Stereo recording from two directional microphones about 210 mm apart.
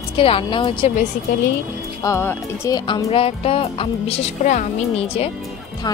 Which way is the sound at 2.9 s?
25° left (ahead or behind).